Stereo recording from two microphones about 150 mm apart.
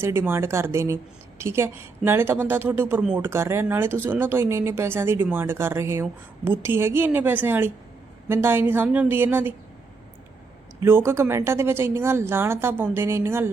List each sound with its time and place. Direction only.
0.0 s speech: 15° right (ahead or behind)
10.8 s speech: 15° right (ahead or behind)